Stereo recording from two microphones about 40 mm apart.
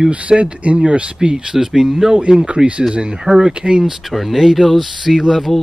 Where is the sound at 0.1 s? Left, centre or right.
Right.